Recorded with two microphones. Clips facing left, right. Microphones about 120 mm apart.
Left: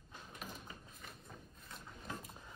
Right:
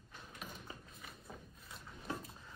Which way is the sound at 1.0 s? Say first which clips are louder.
Even; 5° right (ahead or behind).